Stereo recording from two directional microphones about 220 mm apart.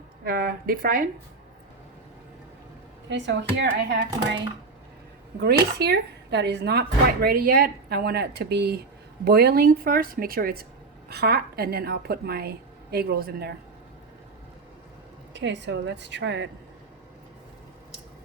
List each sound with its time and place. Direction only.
0.3 s speech: 40° right (ahead or behind)
3.1 s speech: 55° right (ahead or behind)
5.4 s speech: 45° right (ahead or behind)
15.3 s speech: 55° right (ahead or behind)